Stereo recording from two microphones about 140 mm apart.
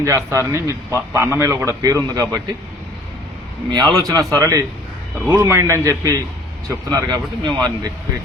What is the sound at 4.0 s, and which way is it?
Speech, 25° right (ahead or behind).